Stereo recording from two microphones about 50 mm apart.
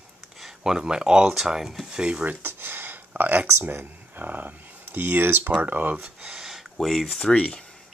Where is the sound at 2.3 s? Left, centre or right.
Right.